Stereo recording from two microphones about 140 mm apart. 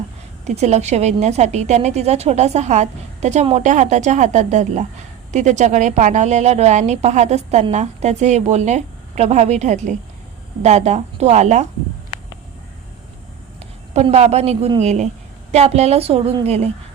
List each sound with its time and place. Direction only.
0.4 s a woman's voice: 50° right (ahead or behind)
13.6 s a woman's voice: 50° right (ahead or behind)